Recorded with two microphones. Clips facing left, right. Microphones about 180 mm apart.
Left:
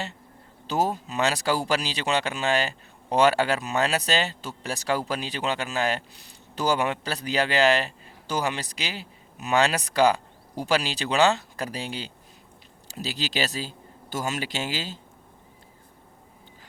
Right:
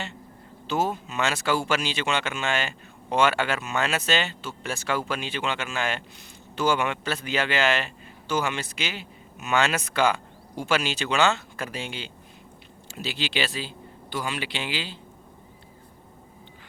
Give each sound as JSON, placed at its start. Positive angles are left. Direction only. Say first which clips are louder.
{"t": 0.7, "sound": "speech", "louder": "left 1 dB", "side_deg": 35}